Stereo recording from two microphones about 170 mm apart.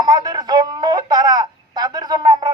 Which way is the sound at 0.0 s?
20° right (ahead or behind).